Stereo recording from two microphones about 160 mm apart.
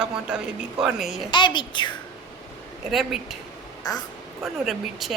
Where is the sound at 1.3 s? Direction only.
30° left (ahead or behind).